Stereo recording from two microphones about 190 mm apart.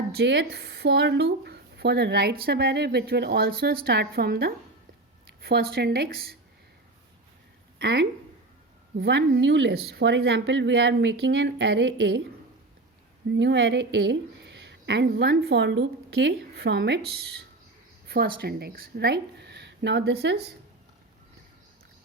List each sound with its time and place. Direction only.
0.2 s a woman's voice: 60° right (ahead or behind)
7.8 s speech: 60° right (ahead or behind)
13.3 s a woman's voice: 65° right (ahead or behind)